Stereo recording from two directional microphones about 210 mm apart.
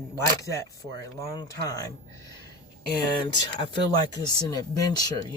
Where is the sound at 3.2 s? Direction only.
20° left (ahead or behind).